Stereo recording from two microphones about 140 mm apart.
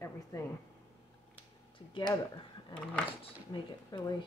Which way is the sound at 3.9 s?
35° left (ahead or behind).